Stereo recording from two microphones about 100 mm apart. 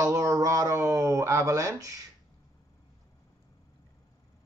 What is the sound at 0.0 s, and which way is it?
Speech, 30° right (ahead or behind).